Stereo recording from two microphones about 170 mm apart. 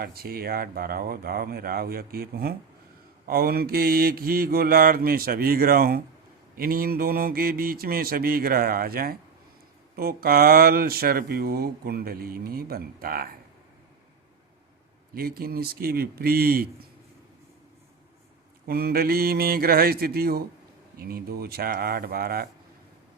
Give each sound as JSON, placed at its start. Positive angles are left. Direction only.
{"t": 0.0, "sound": "speech", "side_deg": -65}
{"t": 15.1, "sound": "speech", "side_deg": -60}
{"t": 18.6, "sound": "speech", "side_deg": -65}